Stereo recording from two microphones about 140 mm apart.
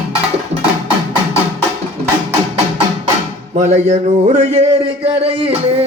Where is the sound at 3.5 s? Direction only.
55° right (ahead or behind).